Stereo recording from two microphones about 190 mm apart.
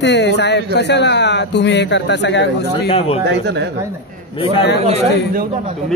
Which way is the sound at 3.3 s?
65° right (ahead or behind).